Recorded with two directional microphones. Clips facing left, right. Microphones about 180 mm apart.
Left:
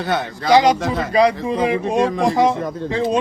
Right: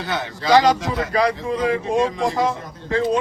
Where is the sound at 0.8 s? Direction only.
60° left (ahead or behind).